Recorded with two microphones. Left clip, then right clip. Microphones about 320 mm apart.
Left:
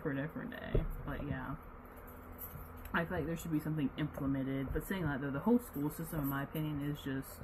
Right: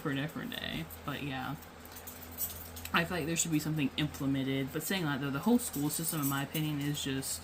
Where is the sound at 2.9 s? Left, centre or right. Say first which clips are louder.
Right 5 dB; centre.